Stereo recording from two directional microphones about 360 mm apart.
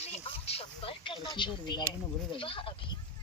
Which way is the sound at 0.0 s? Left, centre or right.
Centre.